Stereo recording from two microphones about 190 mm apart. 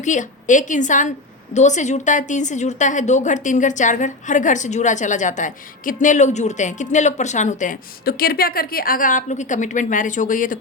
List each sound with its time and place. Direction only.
0.0 s a woman's voice: 40° left (ahead or behind)